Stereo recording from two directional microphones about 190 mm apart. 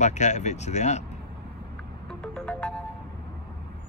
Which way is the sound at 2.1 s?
5° left (ahead or behind).